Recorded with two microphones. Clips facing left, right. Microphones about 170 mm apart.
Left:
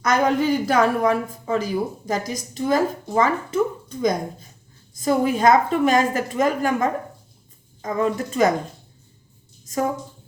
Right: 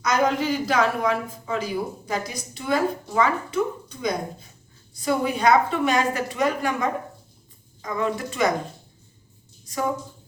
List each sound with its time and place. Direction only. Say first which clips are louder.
0.0 s a woman's voice: left 3 dB; 50° left (ahead or behind)